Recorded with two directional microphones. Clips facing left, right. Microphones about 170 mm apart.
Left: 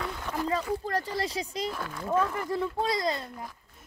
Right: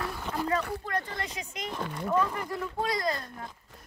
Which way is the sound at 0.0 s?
10° right (ahead or behind).